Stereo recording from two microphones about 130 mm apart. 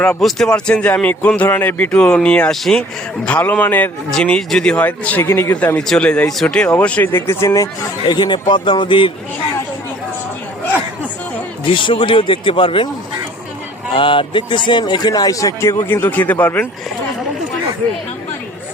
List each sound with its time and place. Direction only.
0.2 s speech: centre (ahead or behind); by 9.1 s 40° left (ahead or behind)
11.6 s speech: 40° left (ahead or behind)
13.9 s a man's voice: 40° left (ahead or behind); by 16.6 s 15° left (ahead or behind)